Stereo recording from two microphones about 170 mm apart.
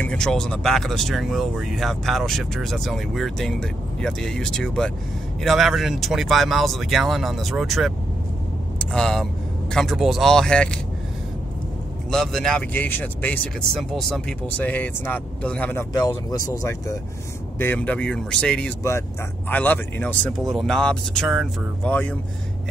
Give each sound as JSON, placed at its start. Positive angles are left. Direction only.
{"t": 0.0, "sound": "speech", "side_deg": 5}
{"t": 12.1, "sound": "speech", "side_deg": 5}
{"t": 18.8, "sound": "speech", "side_deg": 15}